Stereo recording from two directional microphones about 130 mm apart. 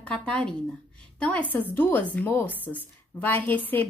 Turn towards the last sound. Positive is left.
turn(degrees=15)  # may be behind; listen again after turning